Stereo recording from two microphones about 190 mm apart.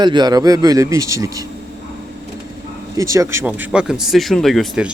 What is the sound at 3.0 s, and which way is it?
Speech, 15° right (ahead or behind).